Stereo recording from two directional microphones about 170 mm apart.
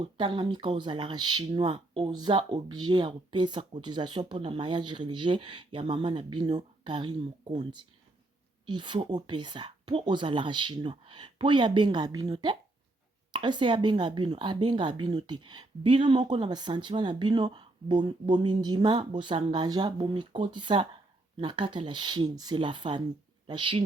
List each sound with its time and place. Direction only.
0.0 s speech: 30° right (ahead or behind)